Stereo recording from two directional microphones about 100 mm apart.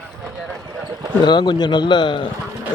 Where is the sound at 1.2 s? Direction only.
50° left (ahead or behind).